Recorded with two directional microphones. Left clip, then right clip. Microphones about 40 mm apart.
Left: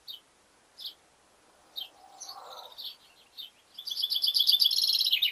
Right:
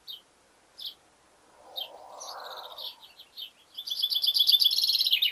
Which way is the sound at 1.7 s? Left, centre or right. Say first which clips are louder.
Right 3 dB; right.